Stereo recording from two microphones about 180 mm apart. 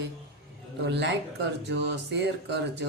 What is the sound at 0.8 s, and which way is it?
Speech, 75° right (ahead or behind).